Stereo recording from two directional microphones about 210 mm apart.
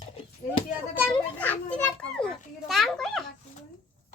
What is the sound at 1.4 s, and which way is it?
A child's voice, 5° left (ahead or behind).